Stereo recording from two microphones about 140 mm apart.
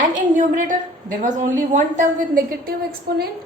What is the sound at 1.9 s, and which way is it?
A woman's voice, 80° right.